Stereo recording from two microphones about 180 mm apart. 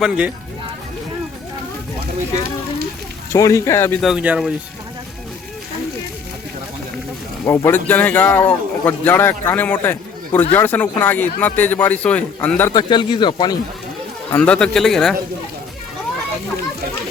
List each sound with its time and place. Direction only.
0.0 s speech: 5° right (ahead or behind)
3.3 s a man's voice: 15° left (ahead or behind)
4.0 s speech: 5° right (ahead or behind)
7.4 s a man's voice: 15° left (ahead or behind)
12.7 s speech: 25° left (ahead or behind)
14.3 s speech: 5° left (ahead or behind)